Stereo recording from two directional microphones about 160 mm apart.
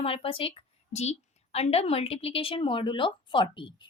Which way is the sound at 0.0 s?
35° left (ahead or behind).